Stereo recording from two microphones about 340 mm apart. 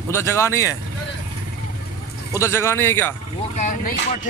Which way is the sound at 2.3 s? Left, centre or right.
Centre.